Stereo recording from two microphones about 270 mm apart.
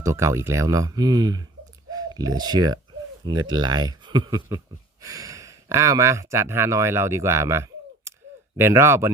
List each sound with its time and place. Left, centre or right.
0.0 s speech: centre